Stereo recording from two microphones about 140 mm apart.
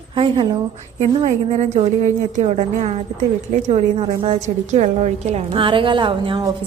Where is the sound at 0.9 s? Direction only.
50° right (ahead or behind).